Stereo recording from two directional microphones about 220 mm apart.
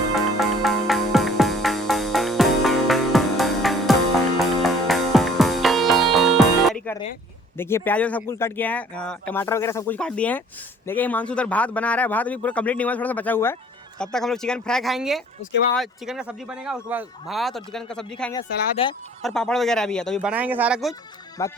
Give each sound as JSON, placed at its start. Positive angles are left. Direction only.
{"t": 0.1, "sound": "music", "side_deg": 0}
{"t": 7.5, "sound": "speech", "side_deg": 10}
{"t": 18.8, "sound": "speech", "side_deg": 25}
{"t": 19.2, "sound": "speech", "side_deg": 5}
{"t": 21.4, "sound": "speech", "side_deg": 15}